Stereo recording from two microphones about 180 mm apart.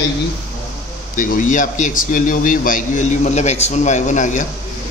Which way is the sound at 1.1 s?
50° left (ahead or behind).